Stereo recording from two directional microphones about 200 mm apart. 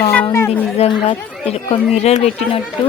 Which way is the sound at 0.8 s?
25° left (ahead or behind).